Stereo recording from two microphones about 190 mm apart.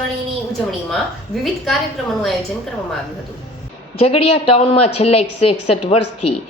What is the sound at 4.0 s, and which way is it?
A woman's voice, 30° left (ahead or behind).